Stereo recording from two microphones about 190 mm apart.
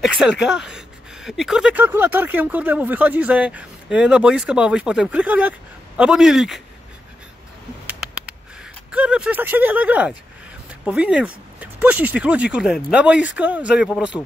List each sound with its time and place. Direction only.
0.0 s speech: 5° right (ahead or behind)
7.8 s a sound: 5° right (ahead or behind)
8.9 s speech: 5° right (ahead or behind)